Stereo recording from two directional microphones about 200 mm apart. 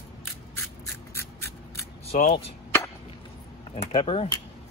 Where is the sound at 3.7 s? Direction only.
30° left (ahead or behind).